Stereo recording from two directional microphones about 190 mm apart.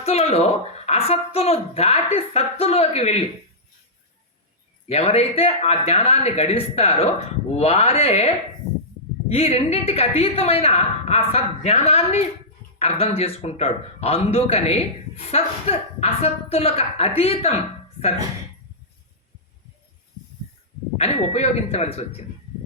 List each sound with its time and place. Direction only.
0.0 s a woman's voice: 35° left (ahead or behind)
4.9 s a woman's voice: 35° left (ahead or behind)
9.3 s a woman's voice: 30° left (ahead or behind)
21.0 s a woman's voice: 35° left (ahead or behind)